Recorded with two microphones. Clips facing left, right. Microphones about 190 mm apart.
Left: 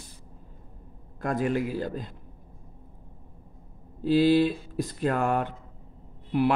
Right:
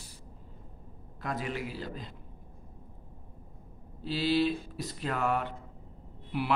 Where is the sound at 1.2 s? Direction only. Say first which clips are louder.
Left 9 dB; 50° left (ahead or behind).